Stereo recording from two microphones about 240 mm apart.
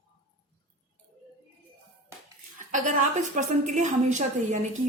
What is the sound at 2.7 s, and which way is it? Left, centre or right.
A woman's voice, right.